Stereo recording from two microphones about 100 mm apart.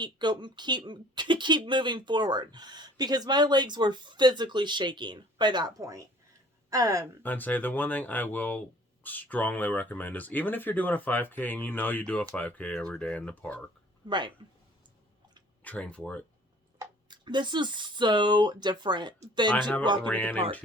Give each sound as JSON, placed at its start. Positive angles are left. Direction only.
{"t": 0.0, "sound": "a woman's voice", "side_deg": -50}
{"t": 7.2, "sound": "speech", "side_deg": 15}
{"t": 14.1, "sound": "speech", "side_deg": -50}
{"t": 15.6, "sound": "speech", "side_deg": 15}
{"t": 17.1, "sound": "speech", "side_deg": -50}
{"t": 19.5, "sound": "speech", "side_deg": 10}